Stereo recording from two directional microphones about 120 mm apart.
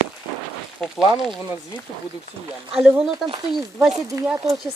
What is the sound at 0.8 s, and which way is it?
Speech, centre (ahead or behind).